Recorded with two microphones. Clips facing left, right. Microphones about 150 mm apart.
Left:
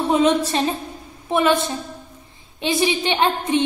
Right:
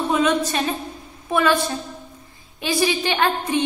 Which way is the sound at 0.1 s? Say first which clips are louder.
Left 3 dB; 30° left (ahead or behind).